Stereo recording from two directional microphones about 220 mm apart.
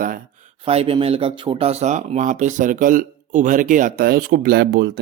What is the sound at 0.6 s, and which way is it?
Speech, 25° right (ahead or behind).